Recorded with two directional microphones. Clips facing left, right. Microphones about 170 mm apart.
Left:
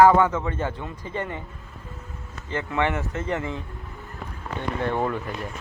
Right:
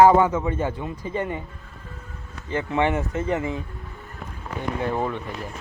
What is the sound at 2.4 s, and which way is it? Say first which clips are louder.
A man's voice: right 3 dB; 15° right (ahead or behind).